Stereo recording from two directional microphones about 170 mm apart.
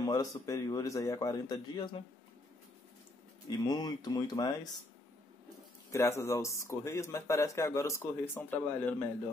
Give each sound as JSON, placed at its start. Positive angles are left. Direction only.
{"t": 0.0, "sound": "a man's voice", "side_deg": 20}
{"t": 3.4, "sound": "a man's voice", "side_deg": 25}
{"t": 5.9, "sound": "a man's voice", "side_deg": 15}